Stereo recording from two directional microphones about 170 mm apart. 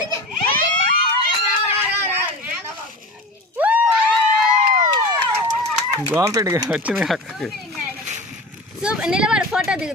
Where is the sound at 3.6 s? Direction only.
10° right (ahead or behind).